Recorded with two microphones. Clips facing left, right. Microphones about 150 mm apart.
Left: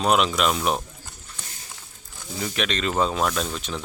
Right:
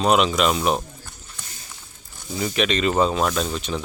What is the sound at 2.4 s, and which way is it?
Speech, 5° right (ahead or behind).